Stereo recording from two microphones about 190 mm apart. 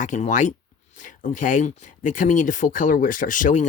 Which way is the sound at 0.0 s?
40° left (ahead or behind).